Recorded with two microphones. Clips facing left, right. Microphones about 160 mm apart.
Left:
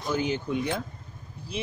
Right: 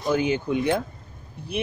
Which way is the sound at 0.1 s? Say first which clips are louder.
Right 5 dB; 65° right (ahead or behind).